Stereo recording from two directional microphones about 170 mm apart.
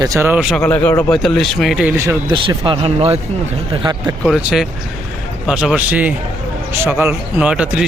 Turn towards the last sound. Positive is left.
turn(degrees=-5)  # may be behind; listen again after turning